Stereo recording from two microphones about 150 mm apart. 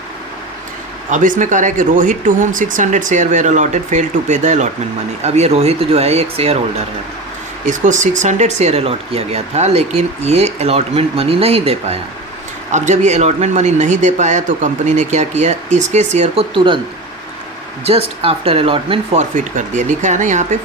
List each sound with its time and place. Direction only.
1.1 s speech: 60° right (ahead or behind); by 6.6 s 40° right (ahead or behind)
7.7 s speech: 55° right (ahead or behind); by 16.8 s 35° right (ahead or behind)
17.8 s speech: 40° right (ahead or behind)
19.5 s speech: 55° right (ahead or behind)